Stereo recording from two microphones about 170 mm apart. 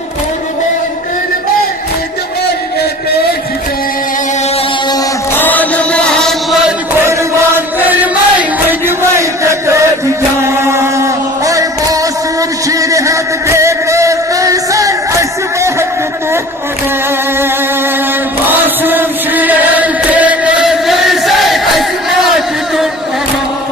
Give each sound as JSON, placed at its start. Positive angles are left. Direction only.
{"t": 5.4, "sound": "chant", "side_deg": 10}
{"t": 7.0, "sound": "music", "side_deg": -15}
{"t": 7.9, "sound": "chant", "side_deg": -10}
{"t": 10.7, "sound": "music", "side_deg": -15}
{"t": 18.4, "sound": "chant", "side_deg": -10}